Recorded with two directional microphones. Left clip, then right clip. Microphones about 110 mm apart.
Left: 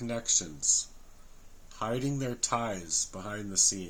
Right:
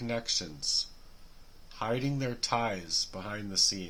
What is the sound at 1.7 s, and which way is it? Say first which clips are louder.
Speech: even; 15° right (ahead or behind).